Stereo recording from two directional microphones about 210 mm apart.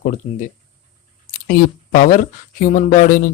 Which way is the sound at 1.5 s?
40° left (ahead or behind).